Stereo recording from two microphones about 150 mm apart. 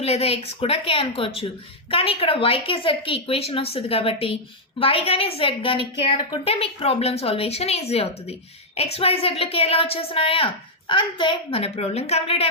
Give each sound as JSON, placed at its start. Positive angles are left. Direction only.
{"t": 0.0, "sound": "a woman's voice", "side_deg": 40}